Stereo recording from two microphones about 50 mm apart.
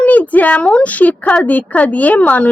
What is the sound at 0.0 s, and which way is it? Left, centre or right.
A woman's voice, left.